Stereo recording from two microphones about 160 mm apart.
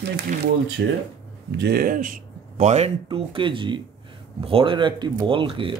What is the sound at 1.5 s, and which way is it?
Speech, 75° right (ahead or behind).